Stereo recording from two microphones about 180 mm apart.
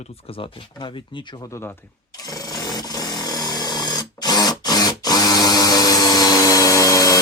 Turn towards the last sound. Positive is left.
turn(degrees=20)  # may be behind; listen again after turning